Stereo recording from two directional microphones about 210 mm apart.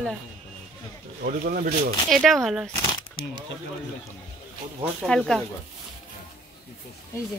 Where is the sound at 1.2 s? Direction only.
40° right (ahead or behind).